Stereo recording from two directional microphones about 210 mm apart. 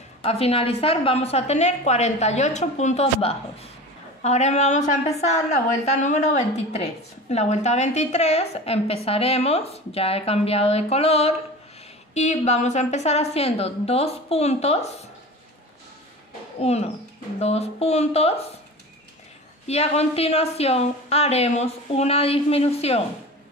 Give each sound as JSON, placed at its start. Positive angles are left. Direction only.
{"t": 0.2, "sound": "a woman's voice", "side_deg": 30}
{"t": 16.5, "sound": "a woman's voice", "side_deg": 30}
{"t": 19.7, "sound": "a woman's voice", "side_deg": 30}